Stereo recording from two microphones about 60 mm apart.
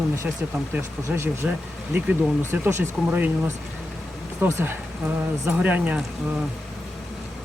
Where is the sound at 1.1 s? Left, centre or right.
Right.